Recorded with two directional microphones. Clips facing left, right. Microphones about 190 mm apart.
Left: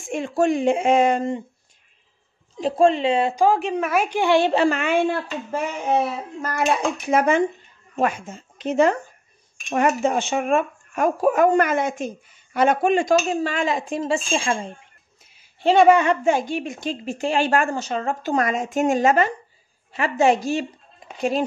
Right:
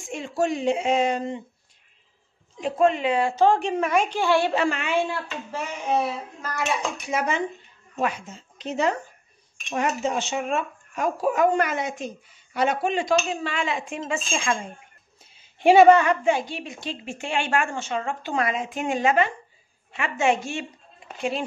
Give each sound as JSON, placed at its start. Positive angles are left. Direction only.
{"t": 0.1, "sound": "speech", "side_deg": 55}
{"t": 2.6, "sound": "speech", "side_deg": 30}
{"t": 3.3, "sound": "a woman's voice", "side_deg": 5}
{"t": 4.2, "sound": "speech", "side_deg": 20}
{"t": 4.7, "sound": "speech", "side_deg": 50}
{"t": 6.4, "sound": "a woman's voice", "side_deg": 55}
{"t": 15.6, "sound": "speech", "side_deg": -5}
{"t": 16.3, "sound": "a woman's voice", "side_deg": 45}